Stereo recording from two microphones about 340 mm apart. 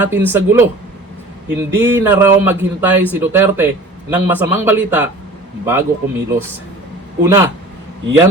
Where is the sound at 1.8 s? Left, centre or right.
Centre.